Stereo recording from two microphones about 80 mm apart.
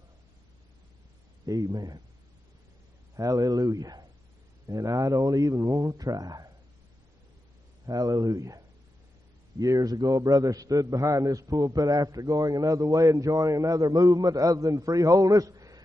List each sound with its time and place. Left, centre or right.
1.4 s a man's voice: right
3.2 s a man's voice: right
7.8 s a man's voice: right